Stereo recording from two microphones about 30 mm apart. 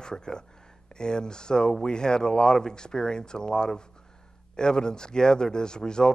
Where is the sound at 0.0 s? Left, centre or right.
Left.